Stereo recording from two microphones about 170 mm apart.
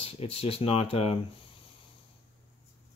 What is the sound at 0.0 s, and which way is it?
Speech, 35° left (ahead or behind).